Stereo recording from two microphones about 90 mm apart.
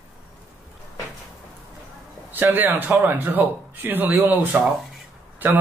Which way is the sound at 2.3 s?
20° right (ahead or behind).